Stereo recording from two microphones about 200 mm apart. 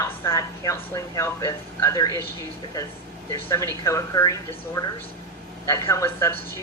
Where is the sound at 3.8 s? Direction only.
15° left (ahead or behind).